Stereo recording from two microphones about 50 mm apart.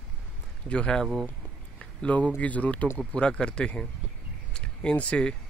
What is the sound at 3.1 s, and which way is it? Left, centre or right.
Speech, centre.